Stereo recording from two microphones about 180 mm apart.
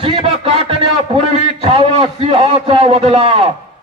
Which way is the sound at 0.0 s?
30° right (ahead or behind).